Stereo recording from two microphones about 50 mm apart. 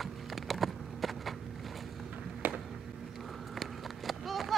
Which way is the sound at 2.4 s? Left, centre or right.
Right.